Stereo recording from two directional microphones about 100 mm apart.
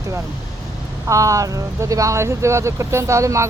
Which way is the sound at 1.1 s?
35° right (ahead or behind).